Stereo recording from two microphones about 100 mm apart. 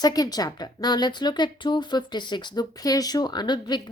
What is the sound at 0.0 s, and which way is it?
Speech, 40° left (ahead or behind).